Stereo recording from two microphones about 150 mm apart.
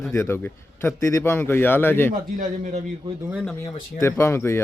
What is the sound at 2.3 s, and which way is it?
Speech, 60° right (ahead or behind).